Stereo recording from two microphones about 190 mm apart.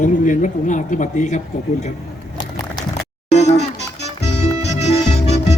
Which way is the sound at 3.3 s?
35° left (ahead or behind).